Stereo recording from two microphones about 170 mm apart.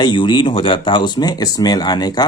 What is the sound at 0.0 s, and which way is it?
Speech, 25° left (ahead or behind).